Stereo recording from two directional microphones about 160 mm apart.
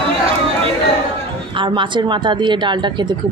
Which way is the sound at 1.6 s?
30° right (ahead or behind).